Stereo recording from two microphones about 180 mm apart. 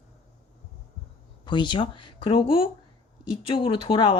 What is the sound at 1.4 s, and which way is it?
Speech, 25° left (ahead or behind).